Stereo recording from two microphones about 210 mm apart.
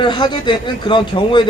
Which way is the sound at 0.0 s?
20° left (ahead or behind).